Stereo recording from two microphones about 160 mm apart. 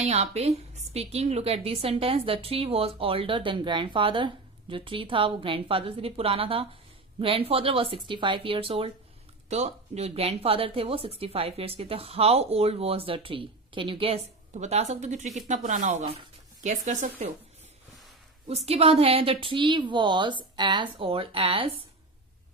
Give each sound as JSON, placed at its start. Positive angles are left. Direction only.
{"t": 0.0, "sound": "speech", "side_deg": -45}
{"t": 18.4, "sound": "speech", "side_deg": -40}